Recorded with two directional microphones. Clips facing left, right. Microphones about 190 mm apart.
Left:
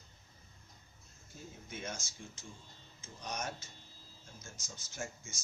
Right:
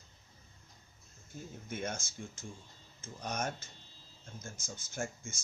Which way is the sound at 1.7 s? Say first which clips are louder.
Right 5 dB; 55° right (ahead or behind).